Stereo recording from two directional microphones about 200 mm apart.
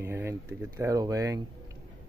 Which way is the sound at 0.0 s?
10° right (ahead or behind).